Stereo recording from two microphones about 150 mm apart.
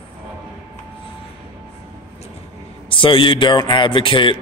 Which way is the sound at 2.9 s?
35° left (ahead or behind).